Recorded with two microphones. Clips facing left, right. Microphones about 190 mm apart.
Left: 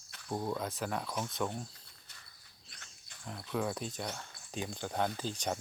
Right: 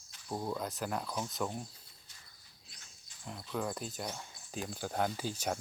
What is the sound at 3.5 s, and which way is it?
Speech, centre (ahead or behind).